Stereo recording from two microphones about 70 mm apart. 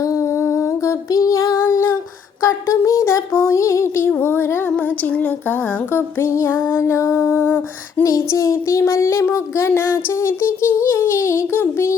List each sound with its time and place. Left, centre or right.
0.0 s music: left
2.4 s a sound: left
4.2 s female singing: left
4.8 s a sound: left
6.1 s female singing: left
8.0 s child singing: left
9.3 s female singing: left